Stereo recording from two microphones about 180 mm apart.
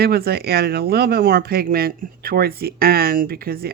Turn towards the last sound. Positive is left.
turn(degrees=-55)  # may be behind; listen again after turning